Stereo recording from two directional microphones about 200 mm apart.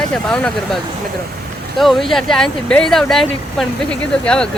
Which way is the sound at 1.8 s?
Centre (ahead or behind).